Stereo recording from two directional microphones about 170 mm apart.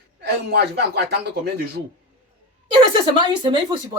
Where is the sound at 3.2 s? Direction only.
30° right (ahead or behind).